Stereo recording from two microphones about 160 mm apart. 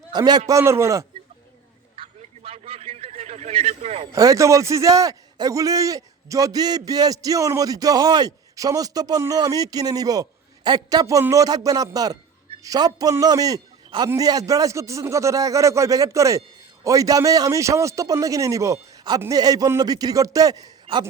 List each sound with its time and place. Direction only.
0.1 s a man's voice: 25° right (ahead or behind)
2.0 s a sound: 35° right (ahead or behind)
4.1 s a man's voice: 20° right (ahead or behind)